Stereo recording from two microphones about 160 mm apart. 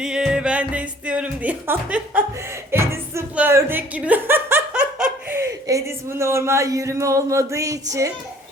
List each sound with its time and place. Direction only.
0.0 s speech: 5° right (ahead or behind); by 8.1 s 20° right (ahead or behind)